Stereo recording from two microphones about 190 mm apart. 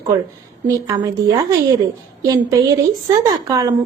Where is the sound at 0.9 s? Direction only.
20° right (ahead or behind).